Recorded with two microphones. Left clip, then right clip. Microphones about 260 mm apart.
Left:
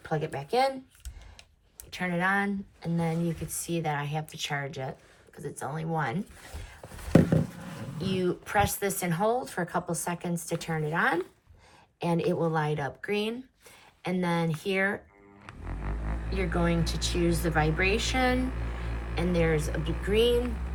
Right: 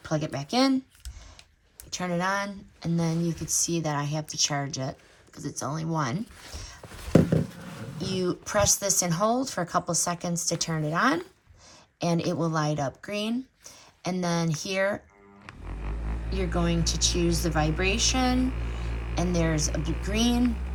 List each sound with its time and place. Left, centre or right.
0.0 s speech: right
1.9 s speech: centre
6.8 s a sound: centre
8.0 s speech: centre
15.4 s roaring cats: centre
16.3 s speech: centre
18.3 s a sound: centre
19.1 s speech: centre
19.7 s speech: centre
20.4 s a sound: centre